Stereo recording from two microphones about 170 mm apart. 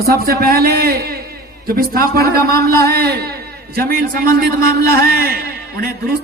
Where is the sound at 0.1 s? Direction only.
65° right (ahead or behind).